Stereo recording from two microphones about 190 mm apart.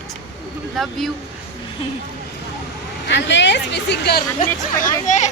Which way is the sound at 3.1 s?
70° left (ahead or behind).